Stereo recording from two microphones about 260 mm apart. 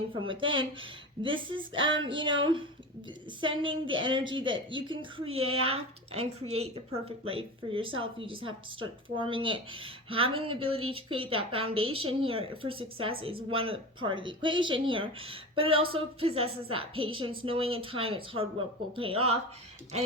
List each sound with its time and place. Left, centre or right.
0.1 s speech: centre
1.8 s a sound: right
2.0 s speech: centre